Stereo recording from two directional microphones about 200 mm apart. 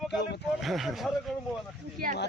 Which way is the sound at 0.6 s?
Centre (ahead or behind).